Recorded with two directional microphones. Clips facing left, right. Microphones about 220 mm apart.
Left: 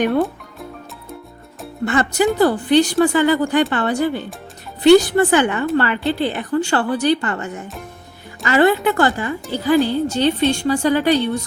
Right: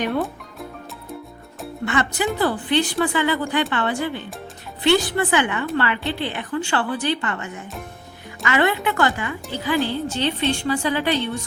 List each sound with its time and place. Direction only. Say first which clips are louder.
1.8 s a woman's voice: left 6 dB; 40° left (ahead or behind)